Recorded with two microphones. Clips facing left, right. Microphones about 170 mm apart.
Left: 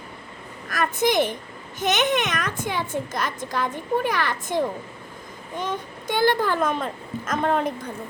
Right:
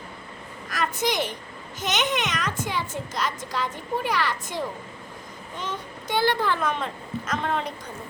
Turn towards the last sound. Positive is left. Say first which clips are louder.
# left 5 dB
turn(degrees=45)  # may be behind; listen again after turning